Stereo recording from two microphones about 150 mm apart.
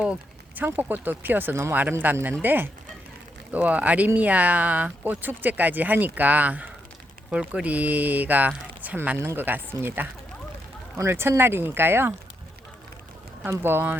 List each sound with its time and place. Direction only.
0.0 s speech: 10° right (ahead or behind)
13.4 s speech: 15° right (ahead or behind)